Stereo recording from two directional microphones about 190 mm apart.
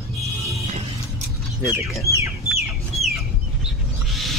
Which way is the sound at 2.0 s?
15° right (ahead or behind).